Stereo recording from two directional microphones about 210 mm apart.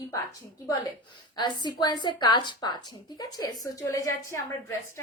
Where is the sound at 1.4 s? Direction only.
20° left (ahead or behind).